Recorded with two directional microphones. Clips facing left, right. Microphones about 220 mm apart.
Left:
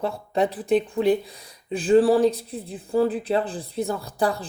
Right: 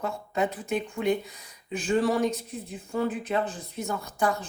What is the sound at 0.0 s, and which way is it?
Speech, 35° left (ahead or behind).